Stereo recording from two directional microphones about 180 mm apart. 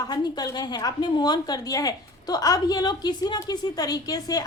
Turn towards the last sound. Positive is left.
turn(degrees=20)  # may be behind; listen again after turning